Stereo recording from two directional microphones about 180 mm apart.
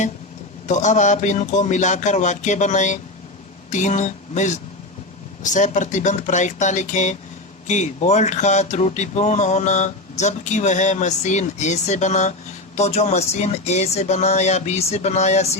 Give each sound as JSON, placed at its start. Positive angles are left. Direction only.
{"t": 0.7, "sound": "speech", "side_deg": 40}